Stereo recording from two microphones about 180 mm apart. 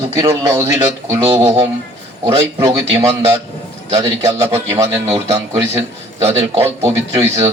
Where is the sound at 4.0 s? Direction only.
15° right (ahead or behind).